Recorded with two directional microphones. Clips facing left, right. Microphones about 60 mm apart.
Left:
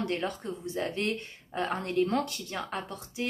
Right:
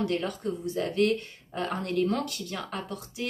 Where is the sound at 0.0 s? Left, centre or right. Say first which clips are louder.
Right 3 dB; left.